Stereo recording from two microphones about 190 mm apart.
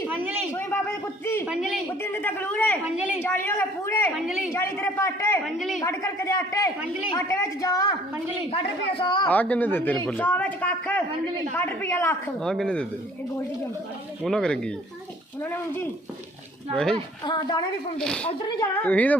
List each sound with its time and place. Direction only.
0.5 s a sound: 10° left (ahead or behind)
1.5 s speech: 5° right (ahead or behind)
2.0 s speech: 10° left (ahead or behind)
5.5 s speech: centre (ahead or behind)
5.8 s a woman's voice: 15° left (ahead or behind)
9.2 s speech: 10° left (ahead or behind)
14.3 s speech: 5° left (ahead or behind)
17.2 s a woman's voice: 25° left (ahead or behind)
17.9 s speech: 5° left (ahead or behind)
18.3 s a woman's voice: 20° left (ahead or behind)
18.8 s speech: 10° left (ahead or behind)